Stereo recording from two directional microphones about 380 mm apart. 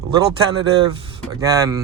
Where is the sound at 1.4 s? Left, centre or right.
Centre.